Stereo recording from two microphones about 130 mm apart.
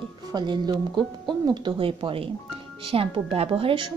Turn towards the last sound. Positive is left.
turn(degrees=-40)  # may be behind; listen again after turning